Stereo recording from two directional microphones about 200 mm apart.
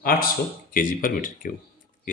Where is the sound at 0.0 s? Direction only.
45° left (ahead or behind).